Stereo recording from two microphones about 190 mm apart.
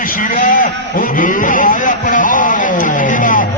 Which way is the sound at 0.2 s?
45° left (ahead or behind).